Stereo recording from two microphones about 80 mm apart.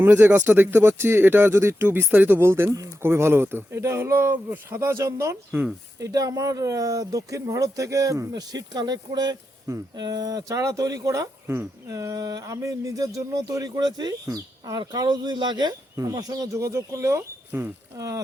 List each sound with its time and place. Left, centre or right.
0.0 s speech: right
6.0 s speech: right
8.3 s speech: right
11.4 s speech: right
11.9 s speech: right
14.8 s speech: right
16.0 s speech: right